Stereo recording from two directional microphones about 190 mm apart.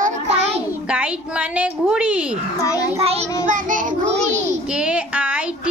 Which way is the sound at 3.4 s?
45° right (ahead or behind).